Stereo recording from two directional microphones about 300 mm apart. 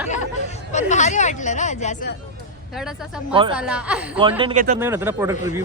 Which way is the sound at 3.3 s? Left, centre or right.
Centre.